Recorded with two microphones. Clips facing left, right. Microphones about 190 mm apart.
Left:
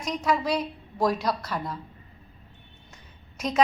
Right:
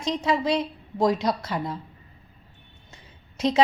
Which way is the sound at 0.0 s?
25° right (ahead or behind).